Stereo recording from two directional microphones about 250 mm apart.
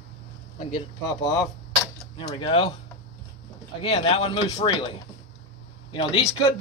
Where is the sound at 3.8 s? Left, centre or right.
Left.